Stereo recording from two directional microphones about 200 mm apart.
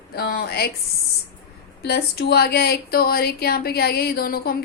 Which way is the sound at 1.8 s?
55° left (ahead or behind).